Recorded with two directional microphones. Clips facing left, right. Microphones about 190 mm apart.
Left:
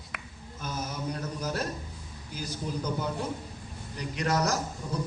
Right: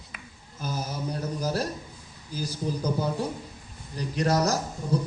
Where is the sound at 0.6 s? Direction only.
35° right (ahead or behind).